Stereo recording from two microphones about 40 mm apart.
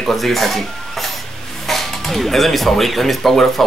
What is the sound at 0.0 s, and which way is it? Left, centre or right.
Speech, centre.